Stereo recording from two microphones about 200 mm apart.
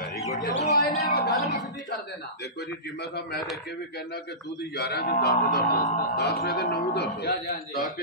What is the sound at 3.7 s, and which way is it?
A man's voice, 55° left (ahead or behind).